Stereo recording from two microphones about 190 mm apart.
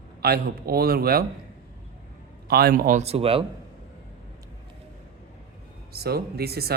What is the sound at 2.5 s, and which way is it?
Speech, 55° right (ahead or behind).